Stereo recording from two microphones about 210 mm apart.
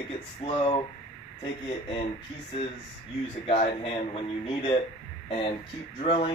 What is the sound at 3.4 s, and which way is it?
Speech, 30° left (ahead or behind).